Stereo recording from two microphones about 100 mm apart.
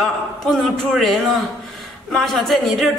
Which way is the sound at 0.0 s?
Centre (ahead or behind).